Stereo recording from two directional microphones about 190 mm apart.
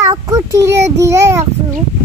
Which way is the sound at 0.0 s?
15° right (ahead or behind).